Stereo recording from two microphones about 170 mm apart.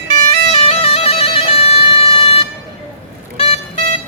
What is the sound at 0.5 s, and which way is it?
Music, 35° left (ahead or behind).